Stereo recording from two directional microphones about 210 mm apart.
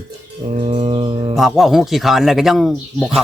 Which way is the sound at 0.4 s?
30° right (ahead or behind).